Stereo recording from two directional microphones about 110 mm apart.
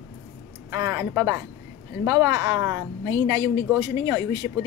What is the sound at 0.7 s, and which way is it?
A woman's voice, 30° right (ahead or behind).